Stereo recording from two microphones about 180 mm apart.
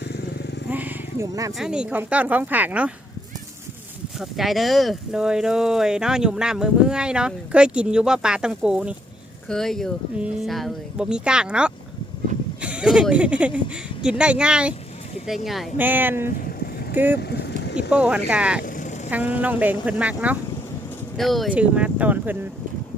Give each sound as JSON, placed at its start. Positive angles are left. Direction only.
{"t": 0.0, "sound": "vehicle", "side_deg": 65}
{"t": 0.7, "sound": "speech", "side_deg": -10}
{"t": 1.5, "sound": "speech", "side_deg": -5}
{"t": 4.2, "sound": "speech", "side_deg": 0}
{"t": 17.2, "sound": "boat", "side_deg": 65}
{"t": 17.8, "sound": "speech", "side_deg": -5}
{"t": 18.6, "sound": "vehicle", "side_deg": 45}
{"t": 19.1, "sound": "speech", "side_deg": -10}